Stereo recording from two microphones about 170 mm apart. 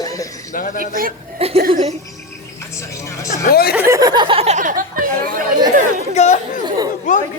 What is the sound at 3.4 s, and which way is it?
Speech, 65° left (ahead or behind).